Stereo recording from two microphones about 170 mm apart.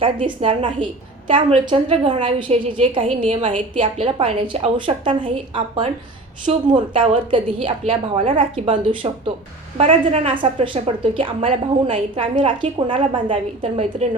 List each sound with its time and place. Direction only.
0.0 s a woman's voice: 30° right (ahead or behind)